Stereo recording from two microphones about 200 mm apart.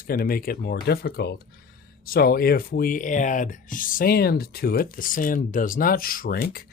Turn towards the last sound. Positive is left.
turn(degrees=50)  # may be behind; listen again after turning